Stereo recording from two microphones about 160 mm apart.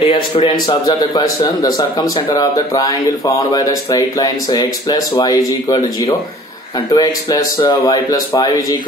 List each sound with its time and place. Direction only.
0.0 s speech: 35° left (ahead or behind)
0.8 s speech: 25° left (ahead or behind)